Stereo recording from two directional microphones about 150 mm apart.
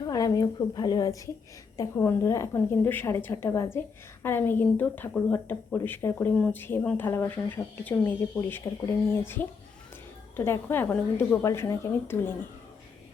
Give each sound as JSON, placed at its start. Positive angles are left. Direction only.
{"t": 0.0, "sound": "a woman's voice", "side_deg": 25}